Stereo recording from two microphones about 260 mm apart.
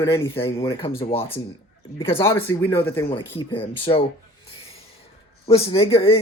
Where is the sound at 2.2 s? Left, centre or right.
Centre.